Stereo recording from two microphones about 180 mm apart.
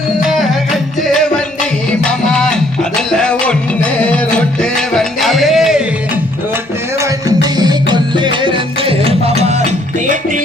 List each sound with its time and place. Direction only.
0.2 s music: centre (ahead or behind)
1.9 s music: 5° left (ahead or behind)
7.0 s music: 20° right (ahead or behind); by 10.4 s 45° right (ahead or behind)